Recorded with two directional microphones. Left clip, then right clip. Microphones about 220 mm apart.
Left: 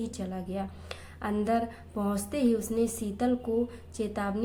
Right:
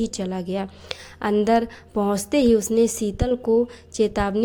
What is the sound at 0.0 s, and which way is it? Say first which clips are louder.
A woman's voice: right 10 dB; 40° right (ahead or behind).